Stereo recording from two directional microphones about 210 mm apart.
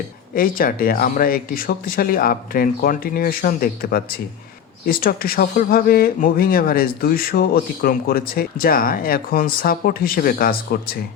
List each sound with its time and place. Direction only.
0.3 s speech: 45° left (ahead or behind)